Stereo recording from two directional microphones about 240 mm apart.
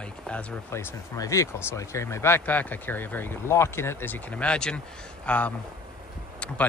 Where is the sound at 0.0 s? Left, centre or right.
Centre.